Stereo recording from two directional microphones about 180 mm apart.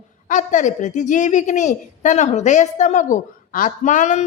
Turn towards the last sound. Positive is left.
turn(degrees=40)  # may be behind; listen again after turning